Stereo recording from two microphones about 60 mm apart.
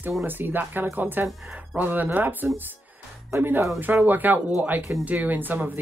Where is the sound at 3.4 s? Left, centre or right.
Right.